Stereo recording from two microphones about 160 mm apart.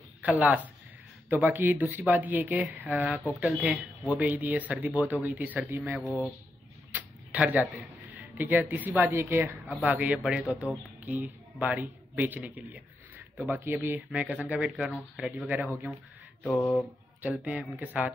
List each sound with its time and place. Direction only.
0.2 s speech: 10° right (ahead or behind)
16.5 s speech: 10° left (ahead or behind)
17.2 s speech: 10° right (ahead or behind)